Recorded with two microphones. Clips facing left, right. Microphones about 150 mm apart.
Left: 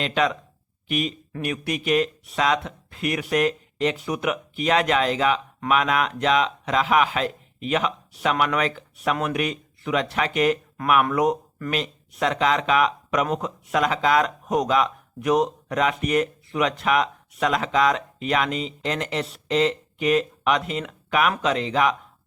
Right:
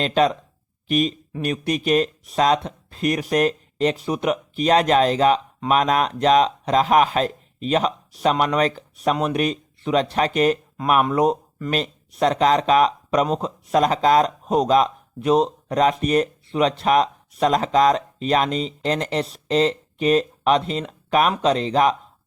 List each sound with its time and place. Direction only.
0.0 s speech: 35° right (ahead or behind)